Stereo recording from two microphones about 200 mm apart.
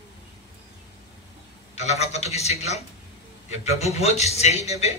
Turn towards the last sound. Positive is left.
turn(degrees=30)  # may be behind; listen again after turning